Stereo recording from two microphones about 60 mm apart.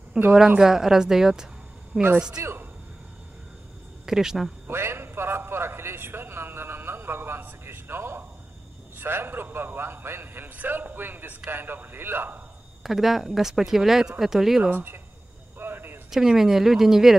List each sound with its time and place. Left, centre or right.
0.2 s speech: centre
1.9 s a man's voice: right
4.0 s speech: centre
4.6 s a sound: right
12.8 s speech: centre
14.7 s speech: right
15.6 s a sound: right
16.1 s speech: centre